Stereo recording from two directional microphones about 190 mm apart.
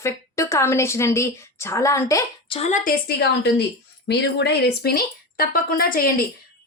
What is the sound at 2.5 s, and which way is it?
A woman's voice, 35° left (ahead or behind).